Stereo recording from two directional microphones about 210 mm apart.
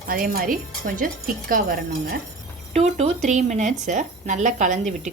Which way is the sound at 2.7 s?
30° right (ahead or behind).